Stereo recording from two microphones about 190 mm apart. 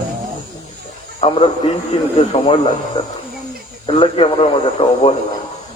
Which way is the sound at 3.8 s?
30° left (ahead or behind).